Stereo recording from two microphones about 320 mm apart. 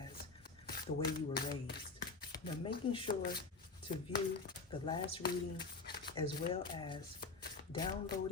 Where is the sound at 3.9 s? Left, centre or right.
Left.